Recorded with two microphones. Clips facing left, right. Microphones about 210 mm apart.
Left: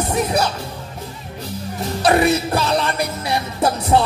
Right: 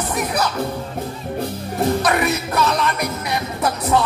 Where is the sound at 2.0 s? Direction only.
30° left (ahead or behind).